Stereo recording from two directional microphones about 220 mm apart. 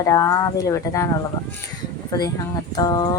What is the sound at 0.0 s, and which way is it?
Speech, 15° left (ahead or behind).